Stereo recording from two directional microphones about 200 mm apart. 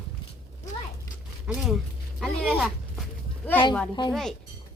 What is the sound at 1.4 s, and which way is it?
Speech, 5° right (ahead or behind).